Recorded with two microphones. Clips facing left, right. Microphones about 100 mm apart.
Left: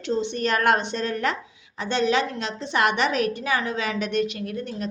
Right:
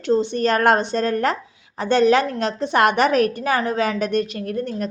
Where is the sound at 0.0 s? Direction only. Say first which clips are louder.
Right 6 dB; 40° right (ahead or behind).